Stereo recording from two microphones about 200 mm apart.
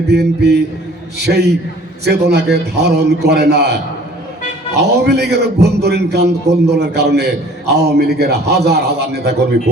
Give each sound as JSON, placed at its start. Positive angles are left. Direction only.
{"t": 0.1, "sound": "a man's voice", "side_deg": -55}
{"t": 2.0, "sound": "a man's voice", "side_deg": -55}
{"t": 4.8, "sound": "a man's voice", "side_deg": -55}